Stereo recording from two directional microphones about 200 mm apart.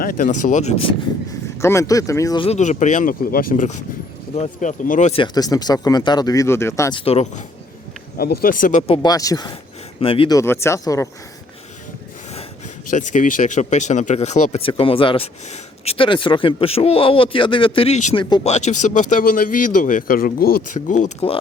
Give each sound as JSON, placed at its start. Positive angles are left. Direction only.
{"t": 0.0, "sound": "speech", "side_deg": 40}
{"t": 1.6, "sound": "speech", "side_deg": 15}
{"t": 5.2, "sound": "speech", "side_deg": 20}
{"t": 7.0, "sound": "speech", "side_deg": 30}
{"t": 8.2, "sound": "speech", "side_deg": 50}
{"t": 8.9, "sound": "speech", "side_deg": 20}
{"t": 10.3, "sound": "speech", "side_deg": 15}
{"t": 12.9, "sound": "speech", "side_deg": 40}
{"t": 18.5, "sound": "speech", "side_deg": 35}